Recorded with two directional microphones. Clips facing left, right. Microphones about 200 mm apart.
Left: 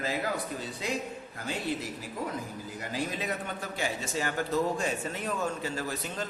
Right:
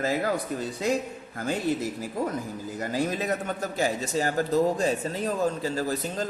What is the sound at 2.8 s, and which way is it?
A man's voice, 45° right (ahead or behind).